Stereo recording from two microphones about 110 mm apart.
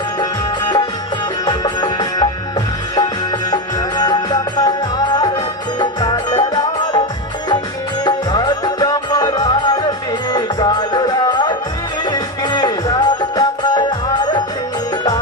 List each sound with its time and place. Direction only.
1.5 s music: 40° left (ahead or behind)
3.5 s music: 35° left (ahead or behind)
5.8 s music: 40° left (ahead or behind)
8.0 s music: 40° left (ahead or behind)